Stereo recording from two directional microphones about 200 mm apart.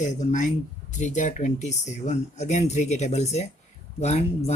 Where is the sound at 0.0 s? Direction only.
35° left (ahead or behind).